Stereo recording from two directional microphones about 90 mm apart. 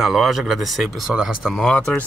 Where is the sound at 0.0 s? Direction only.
5° right (ahead or behind).